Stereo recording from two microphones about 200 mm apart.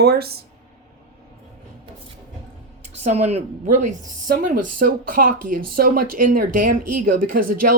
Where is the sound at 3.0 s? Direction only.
35° right (ahead or behind).